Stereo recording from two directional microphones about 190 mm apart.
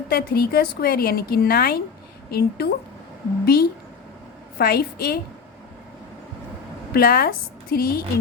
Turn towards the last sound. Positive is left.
turn(degrees=50)  # may be behind; listen again after turning